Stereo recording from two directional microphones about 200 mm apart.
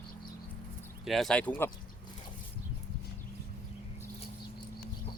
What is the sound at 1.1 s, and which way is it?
Speech, centre (ahead or behind).